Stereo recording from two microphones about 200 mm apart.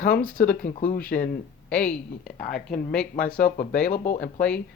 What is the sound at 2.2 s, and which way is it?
Speech, 45° left (ahead or behind).